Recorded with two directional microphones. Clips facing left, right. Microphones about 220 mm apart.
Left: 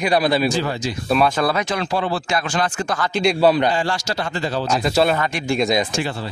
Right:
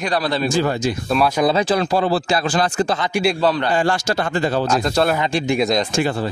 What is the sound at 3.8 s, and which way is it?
Speech, 50° right (ahead or behind).